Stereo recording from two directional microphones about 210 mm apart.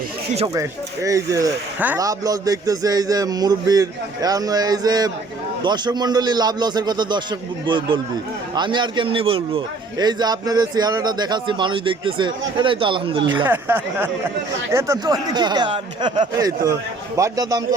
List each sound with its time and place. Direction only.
0.3 s a man's voice: 20° right (ahead or behind)
13.4 s a man's voice: 10° right (ahead or behind)